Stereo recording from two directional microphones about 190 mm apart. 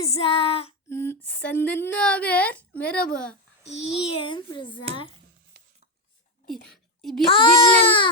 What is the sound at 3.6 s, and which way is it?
A child's voice, 35° left (ahead or behind).